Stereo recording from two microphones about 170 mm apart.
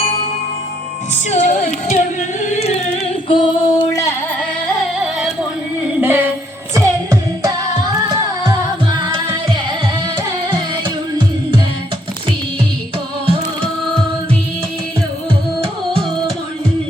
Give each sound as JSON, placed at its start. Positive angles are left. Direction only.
{"t": 1.1, "sound": "music", "side_deg": 45}
{"t": 2.4, "sound": "singing", "side_deg": 40}
{"t": 3.2, "sound": "female singing", "side_deg": 30}
{"t": 5.2, "sound": "a sound", "side_deg": -5}
{"t": 6.7, "sound": "music", "side_deg": -20}